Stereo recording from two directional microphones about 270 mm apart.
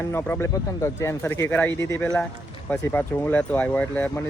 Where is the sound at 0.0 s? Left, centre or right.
Centre.